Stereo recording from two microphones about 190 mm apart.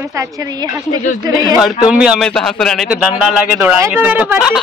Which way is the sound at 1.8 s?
5° right (ahead or behind).